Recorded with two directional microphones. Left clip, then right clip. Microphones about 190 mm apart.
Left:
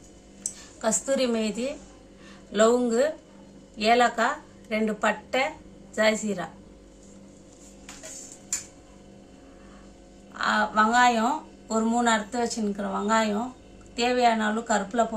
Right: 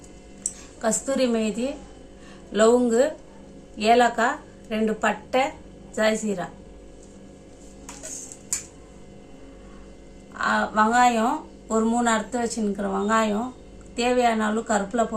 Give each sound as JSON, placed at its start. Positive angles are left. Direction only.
{"t": 0.8, "sound": "a woman's voice", "side_deg": 15}
{"t": 10.3, "sound": "a woman's voice", "side_deg": 0}